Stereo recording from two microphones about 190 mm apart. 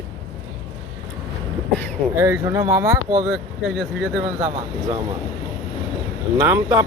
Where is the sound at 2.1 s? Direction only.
15° right (ahead or behind).